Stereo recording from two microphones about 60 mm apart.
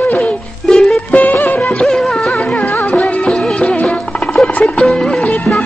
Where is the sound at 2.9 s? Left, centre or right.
Centre.